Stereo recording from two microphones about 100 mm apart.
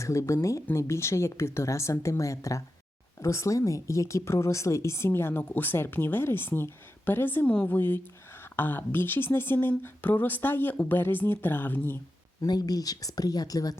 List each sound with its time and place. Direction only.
0.0 s speech: 30° left (ahead or behind)
12.4 s speech: 40° left (ahead or behind)